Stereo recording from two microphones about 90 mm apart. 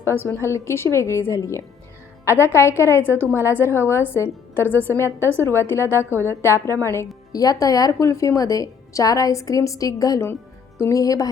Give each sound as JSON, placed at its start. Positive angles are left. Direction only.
{"t": 0.0, "sound": "a woman's voice", "side_deg": 25}
{"t": 7.3, "sound": "a woman's voice", "side_deg": 40}